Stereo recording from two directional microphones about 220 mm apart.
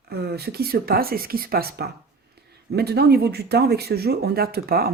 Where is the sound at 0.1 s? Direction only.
45° right (ahead or behind).